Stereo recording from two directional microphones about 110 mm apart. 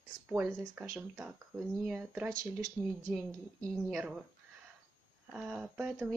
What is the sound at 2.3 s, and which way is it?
Speech, 30° right (ahead or behind).